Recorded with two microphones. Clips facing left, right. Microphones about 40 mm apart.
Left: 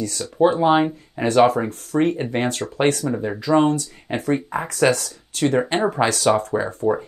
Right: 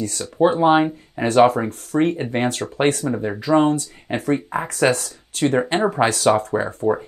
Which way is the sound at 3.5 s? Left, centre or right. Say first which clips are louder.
Right 1 dB; centre.